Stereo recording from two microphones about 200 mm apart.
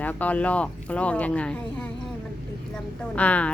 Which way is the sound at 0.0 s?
10° left (ahead or behind).